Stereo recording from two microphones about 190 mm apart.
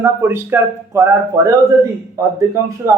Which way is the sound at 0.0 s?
10° right (ahead or behind).